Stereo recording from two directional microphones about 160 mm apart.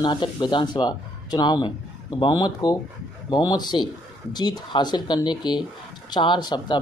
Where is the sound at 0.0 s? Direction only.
25° left (ahead or behind).